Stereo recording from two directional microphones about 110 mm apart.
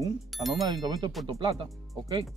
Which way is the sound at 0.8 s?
40° right (ahead or behind).